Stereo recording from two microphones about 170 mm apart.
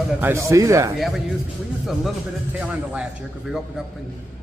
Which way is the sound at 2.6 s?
5° right (ahead or behind).